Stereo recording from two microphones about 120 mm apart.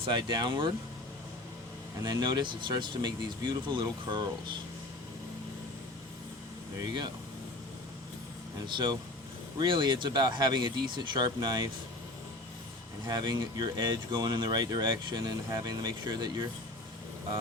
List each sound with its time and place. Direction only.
0.0 s speech: 40° right (ahead or behind)
2.0 s speech: 35° right (ahead or behind)
6.7 s speech: 35° right (ahead or behind)
8.5 s speech: 40° right (ahead or behind)
13.1 s speech: 35° right (ahead or behind)